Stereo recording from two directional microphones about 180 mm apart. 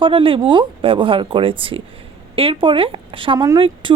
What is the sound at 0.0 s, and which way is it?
Speech, 30° right (ahead or behind).